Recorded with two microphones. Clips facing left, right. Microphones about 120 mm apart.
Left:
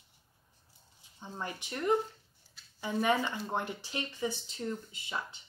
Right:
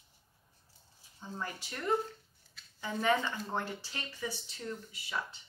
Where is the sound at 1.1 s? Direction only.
20° left (ahead or behind).